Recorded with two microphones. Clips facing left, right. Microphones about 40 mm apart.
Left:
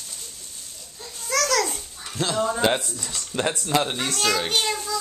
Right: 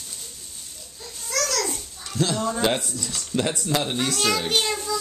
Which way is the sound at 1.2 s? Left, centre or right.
Left.